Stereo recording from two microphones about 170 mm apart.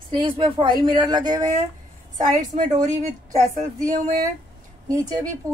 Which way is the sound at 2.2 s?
50° right (ahead or behind).